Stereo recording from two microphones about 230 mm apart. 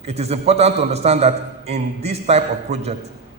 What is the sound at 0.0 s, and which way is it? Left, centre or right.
A man's voice, right.